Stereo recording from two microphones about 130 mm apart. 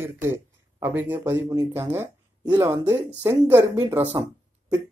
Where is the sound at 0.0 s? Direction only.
20° right (ahead or behind).